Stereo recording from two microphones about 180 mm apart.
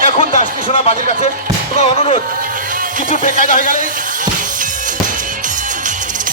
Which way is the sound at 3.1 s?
45° right (ahead or behind).